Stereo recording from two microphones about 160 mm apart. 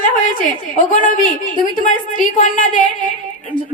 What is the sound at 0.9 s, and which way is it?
A woman's voice, 50° left (ahead or behind).